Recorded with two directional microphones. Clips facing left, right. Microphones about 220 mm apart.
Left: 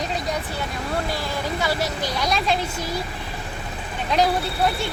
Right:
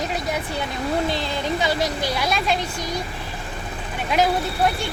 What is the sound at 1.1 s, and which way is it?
Speech, 20° right (ahead or behind).